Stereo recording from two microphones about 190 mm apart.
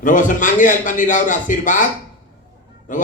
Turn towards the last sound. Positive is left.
turn(degrees=45)  # may be behind; listen again after turning